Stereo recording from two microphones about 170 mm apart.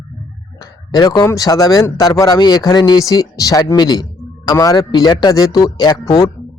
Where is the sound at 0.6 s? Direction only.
25° left (ahead or behind).